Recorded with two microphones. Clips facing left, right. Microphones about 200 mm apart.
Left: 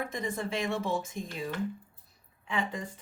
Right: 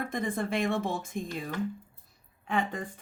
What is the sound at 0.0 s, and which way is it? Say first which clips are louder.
Speech: right 2 dB; 55° right (ahead or behind).